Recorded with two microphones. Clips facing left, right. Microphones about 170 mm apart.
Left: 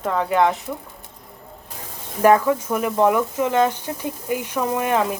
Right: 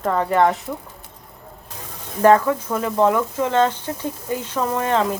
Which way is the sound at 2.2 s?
15° left (ahead or behind).